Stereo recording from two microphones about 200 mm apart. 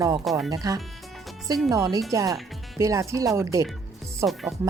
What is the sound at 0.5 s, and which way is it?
Speech, 20° right (ahead or behind).